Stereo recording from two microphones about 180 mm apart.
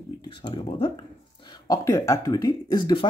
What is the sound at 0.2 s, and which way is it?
Speech, 25° left (ahead or behind).